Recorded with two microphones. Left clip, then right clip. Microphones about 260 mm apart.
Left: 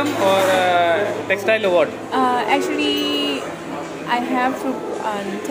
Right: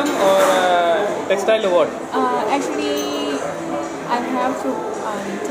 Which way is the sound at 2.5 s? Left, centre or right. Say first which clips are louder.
Left 1 dB; left.